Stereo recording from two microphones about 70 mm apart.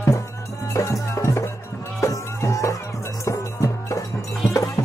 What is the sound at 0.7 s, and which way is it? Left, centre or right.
Music, left.